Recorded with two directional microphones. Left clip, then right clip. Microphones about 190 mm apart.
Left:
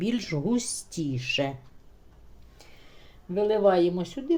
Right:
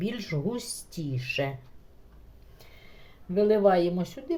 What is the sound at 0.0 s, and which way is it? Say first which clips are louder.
Speech: left 3 dB; 30° left (ahead or behind).